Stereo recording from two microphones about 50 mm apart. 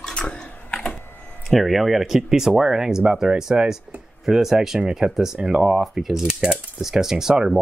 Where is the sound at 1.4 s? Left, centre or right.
Centre.